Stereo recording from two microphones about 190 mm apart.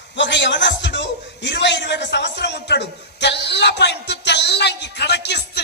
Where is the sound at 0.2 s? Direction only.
70° left (ahead or behind).